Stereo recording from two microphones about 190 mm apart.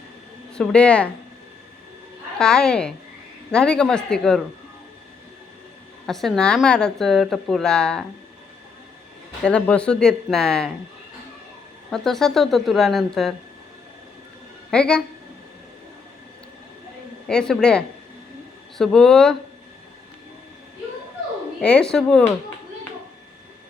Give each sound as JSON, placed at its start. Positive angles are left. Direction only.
{"t": 0.5, "sound": "a woman's voice", "side_deg": 5}
{"t": 2.4, "sound": "a woman's voice", "side_deg": 5}
{"t": 6.1, "sound": "a woman's voice", "side_deg": 0}
{"t": 9.4, "sound": "a woman's voice", "side_deg": 5}
{"t": 11.9, "sound": "a woman's voice", "side_deg": 0}
{"t": 14.7, "sound": "a woman's voice", "side_deg": 5}
{"t": 17.2, "sound": "a woman's voice", "side_deg": 5}
{"t": 21.6, "sound": "a woman's voice", "side_deg": 5}